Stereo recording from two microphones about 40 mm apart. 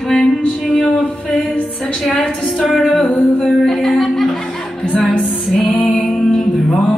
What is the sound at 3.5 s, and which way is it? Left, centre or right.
Music, centre.